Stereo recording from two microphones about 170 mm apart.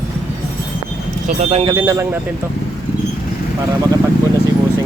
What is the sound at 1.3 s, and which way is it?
Speech, 50° right (ahead or behind).